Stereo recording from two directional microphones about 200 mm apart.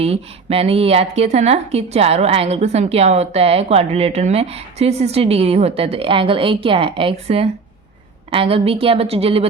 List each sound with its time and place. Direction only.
0.0 s a woman's voice: 30° right (ahead or behind)